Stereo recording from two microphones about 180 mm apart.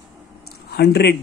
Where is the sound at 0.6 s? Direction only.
65° left (ahead or behind).